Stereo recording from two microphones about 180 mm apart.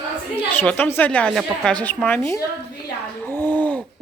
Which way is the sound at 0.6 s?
10° left (ahead or behind).